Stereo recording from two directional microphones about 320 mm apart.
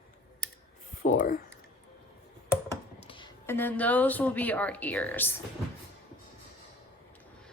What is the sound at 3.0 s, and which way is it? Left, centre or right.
Speech, centre.